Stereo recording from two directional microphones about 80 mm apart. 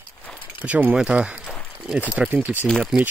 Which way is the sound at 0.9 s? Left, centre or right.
Centre.